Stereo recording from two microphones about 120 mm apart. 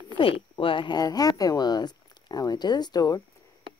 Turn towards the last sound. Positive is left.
turn(degrees=35)  # may be behind; listen again after turning